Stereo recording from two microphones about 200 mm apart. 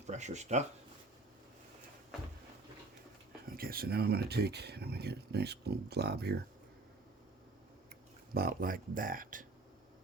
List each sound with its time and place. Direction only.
0.1 s speech: 35° right (ahead or behind)
3.5 s speech: 50° right (ahead or behind)
8.3 s speech: 45° right (ahead or behind)